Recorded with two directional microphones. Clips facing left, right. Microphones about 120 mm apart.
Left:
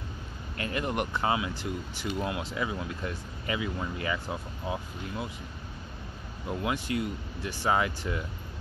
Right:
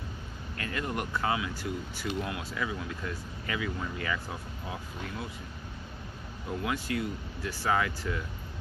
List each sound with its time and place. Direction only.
0.6 s speech: 20° left (ahead or behind)
6.6 s speech: 20° left (ahead or behind)